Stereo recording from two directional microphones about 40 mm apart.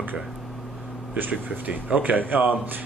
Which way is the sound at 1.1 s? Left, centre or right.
Right.